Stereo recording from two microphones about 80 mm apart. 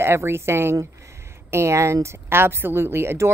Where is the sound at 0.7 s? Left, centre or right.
Right.